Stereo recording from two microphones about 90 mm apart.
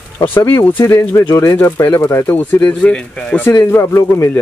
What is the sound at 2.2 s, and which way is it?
Speech, 20° left (ahead or behind).